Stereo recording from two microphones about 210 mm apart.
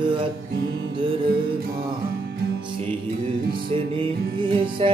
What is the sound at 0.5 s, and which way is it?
Music, 45° right (ahead or behind).